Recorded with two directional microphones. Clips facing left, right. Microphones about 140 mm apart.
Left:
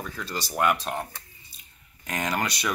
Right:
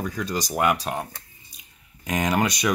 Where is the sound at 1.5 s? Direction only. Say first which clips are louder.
Right 3 dB; 15° right (ahead or behind).